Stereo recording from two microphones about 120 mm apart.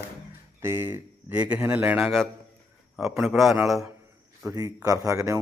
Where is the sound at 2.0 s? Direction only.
Centre (ahead or behind).